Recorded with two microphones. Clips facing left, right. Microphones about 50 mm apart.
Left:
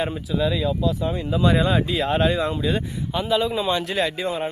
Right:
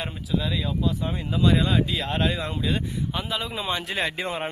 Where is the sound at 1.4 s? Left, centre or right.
Centre.